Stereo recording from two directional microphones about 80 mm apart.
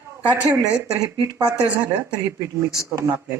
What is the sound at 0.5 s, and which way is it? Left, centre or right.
Speech, right.